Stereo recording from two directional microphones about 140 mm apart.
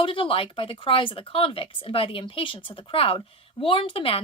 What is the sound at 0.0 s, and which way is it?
Speech, 40° left (ahead or behind).